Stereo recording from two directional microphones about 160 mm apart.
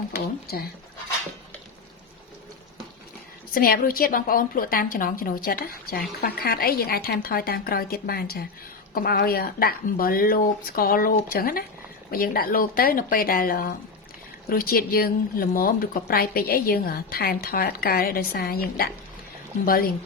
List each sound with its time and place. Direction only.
3.5 s a woman's voice: 65° left (ahead or behind)